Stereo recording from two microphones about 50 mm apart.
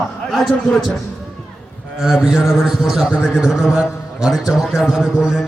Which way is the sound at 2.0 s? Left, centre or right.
Centre.